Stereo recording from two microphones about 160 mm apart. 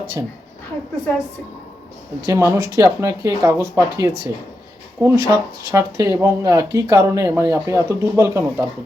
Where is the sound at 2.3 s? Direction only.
20° right (ahead or behind).